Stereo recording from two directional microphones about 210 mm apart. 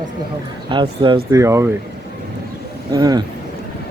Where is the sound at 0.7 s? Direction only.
25° right (ahead or behind).